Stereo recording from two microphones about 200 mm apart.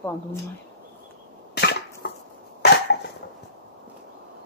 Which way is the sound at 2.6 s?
55° left (ahead or behind).